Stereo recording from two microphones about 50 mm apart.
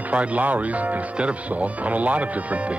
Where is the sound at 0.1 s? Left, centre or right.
Right.